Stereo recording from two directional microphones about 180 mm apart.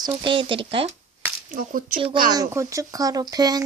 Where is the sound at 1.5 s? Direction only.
50° right (ahead or behind).